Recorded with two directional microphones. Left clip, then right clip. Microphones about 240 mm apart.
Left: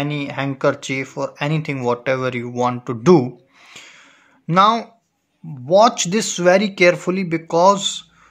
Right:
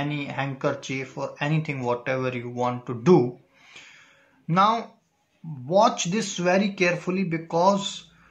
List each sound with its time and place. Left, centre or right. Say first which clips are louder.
0.0 s speech: left 5 dB; left